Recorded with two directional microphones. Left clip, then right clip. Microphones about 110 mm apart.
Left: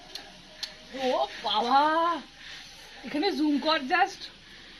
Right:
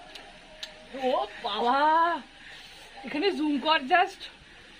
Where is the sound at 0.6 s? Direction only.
5° left (ahead or behind).